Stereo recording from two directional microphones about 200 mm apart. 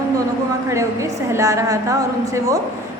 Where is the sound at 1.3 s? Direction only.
15° right (ahead or behind).